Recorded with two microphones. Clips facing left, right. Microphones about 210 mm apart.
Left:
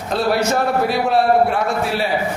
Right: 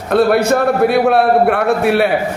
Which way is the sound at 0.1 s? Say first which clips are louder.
Right 6 dB; 60° right (ahead or behind).